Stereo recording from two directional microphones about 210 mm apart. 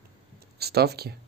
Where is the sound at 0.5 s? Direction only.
50° right (ahead or behind).